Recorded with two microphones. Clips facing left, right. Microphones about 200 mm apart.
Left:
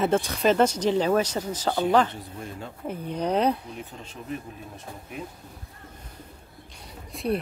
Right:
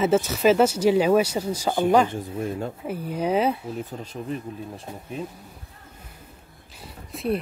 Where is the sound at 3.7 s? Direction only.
40° right (ahead or behind).